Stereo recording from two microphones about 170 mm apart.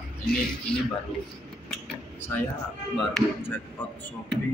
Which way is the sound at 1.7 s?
5° left (ahead or behind).